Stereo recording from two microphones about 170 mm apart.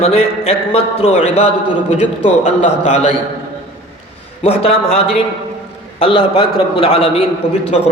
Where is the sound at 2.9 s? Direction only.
40° left (ahead or behind).